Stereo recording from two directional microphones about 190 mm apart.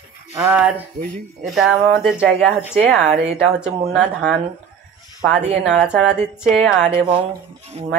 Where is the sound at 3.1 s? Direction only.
35° right (ahead or behind).